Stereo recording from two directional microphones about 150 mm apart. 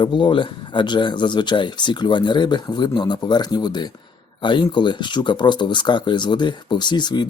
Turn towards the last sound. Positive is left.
turn(degrees=30)  # may be behind; listen again after turning